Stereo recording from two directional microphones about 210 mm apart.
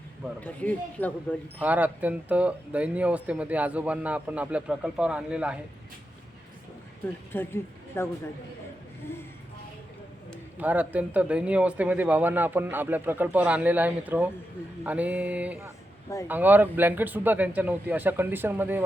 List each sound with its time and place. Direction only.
0.3 s speech: 5° left (ahead or behind)
1.6 s speech: 10° right (ahead or behind)
7.3 s speech: 10° left (ahead or behind)
10.6 s speech: 5° right (ahead or behind)